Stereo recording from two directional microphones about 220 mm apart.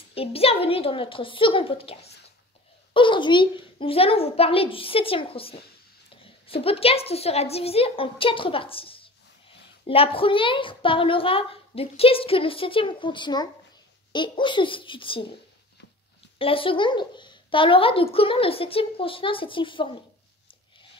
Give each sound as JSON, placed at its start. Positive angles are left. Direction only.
{"t": 0.1, "sound": "a woman's voice", "side_deg": 25}
{"t": 16.3, "sound": "a woman's voice", "side_deg": 25}